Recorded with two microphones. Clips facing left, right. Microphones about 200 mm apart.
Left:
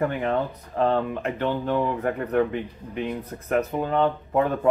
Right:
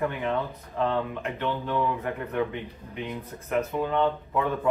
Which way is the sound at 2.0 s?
55° left (ahead or behind).